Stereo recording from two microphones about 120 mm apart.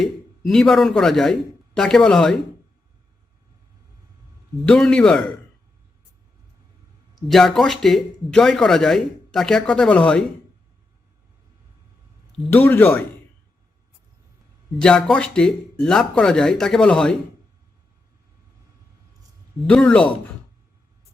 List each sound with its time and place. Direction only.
0.0 s speech: 5° left (ahead or behind)
4.6 s speech: 5° left (ahead or behind)
7.2 s speech: centre (ahead or behind)
12.5 s speech: 15° left (ahead or behind)
14.8 s speech: 5° left (ahead or behind)
19.6 s speech: 10° left (ahead or behind)